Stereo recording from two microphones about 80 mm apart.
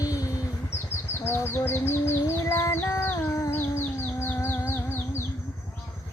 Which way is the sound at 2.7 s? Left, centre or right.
Left.